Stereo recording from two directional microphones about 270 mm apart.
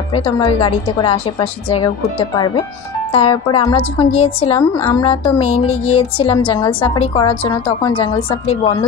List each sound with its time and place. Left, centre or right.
0.1 s a woman's voice: centre